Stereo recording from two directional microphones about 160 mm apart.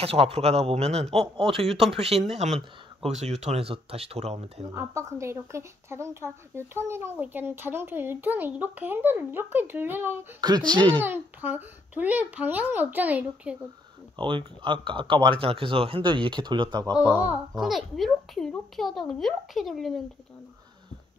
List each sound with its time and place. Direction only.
0.0 s speech: 40° right (ahead or behind)
4.7 s a woman's voice: 15° right (ahead or behind)
10.4 s speech: 25° right (ahead or behind)
11.0 s a woman's voice: 10° right (ahead or behind)
14.1 s speech: 30° right (ahead or behind)
17.0 s a child's voice: 10° right (ahead or behind)